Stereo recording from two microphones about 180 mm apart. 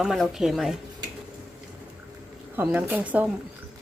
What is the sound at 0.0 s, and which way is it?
Speech, centre (ahead or behind).